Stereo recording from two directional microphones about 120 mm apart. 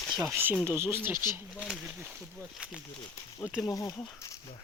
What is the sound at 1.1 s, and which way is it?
Speech, 35° left (ahead or behind).